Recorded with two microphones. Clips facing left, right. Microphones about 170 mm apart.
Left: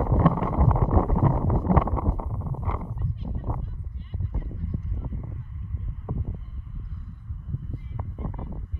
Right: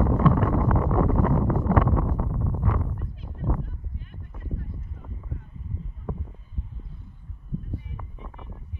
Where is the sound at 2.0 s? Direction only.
10° left (ahead or behind).